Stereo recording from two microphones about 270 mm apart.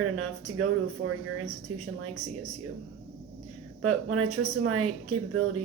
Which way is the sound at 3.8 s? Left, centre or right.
Right.